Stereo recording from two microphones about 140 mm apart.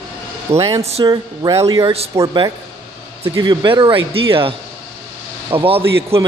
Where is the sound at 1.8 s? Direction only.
45° right (ahead or behind).